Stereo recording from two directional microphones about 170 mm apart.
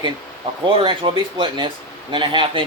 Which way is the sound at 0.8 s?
30° right (ahead or behind).